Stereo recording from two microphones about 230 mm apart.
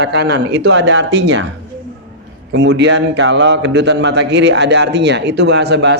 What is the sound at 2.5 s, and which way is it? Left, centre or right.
A man's voice, right.